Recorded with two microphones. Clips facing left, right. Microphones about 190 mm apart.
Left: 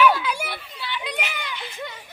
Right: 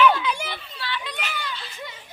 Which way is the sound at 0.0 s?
10° left (ahead or behind).